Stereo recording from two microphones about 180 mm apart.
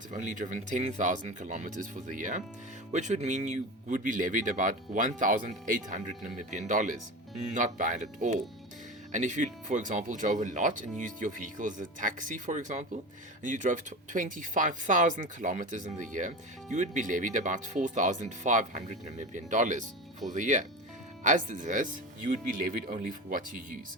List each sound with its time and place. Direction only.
0.1 s speech: 45° right (ahead or behind)